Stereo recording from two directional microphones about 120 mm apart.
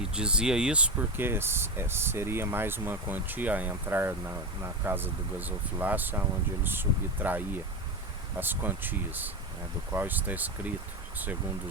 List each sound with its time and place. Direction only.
0.1 s speech: 10° right (ahead or behind)